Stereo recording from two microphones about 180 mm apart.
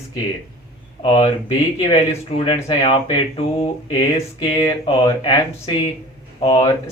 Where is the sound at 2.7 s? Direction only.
30° left (ahead or behind).